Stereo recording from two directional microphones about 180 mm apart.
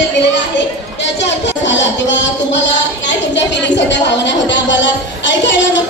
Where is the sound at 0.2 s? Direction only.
80° left.